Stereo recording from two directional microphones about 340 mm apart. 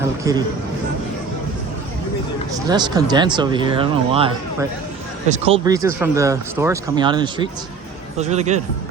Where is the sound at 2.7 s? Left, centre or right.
Centre.